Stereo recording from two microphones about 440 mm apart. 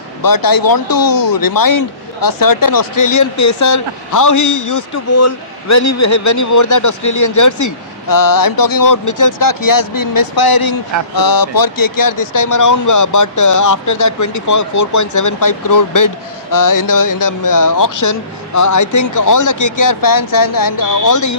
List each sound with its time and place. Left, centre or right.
0.2 s speech: left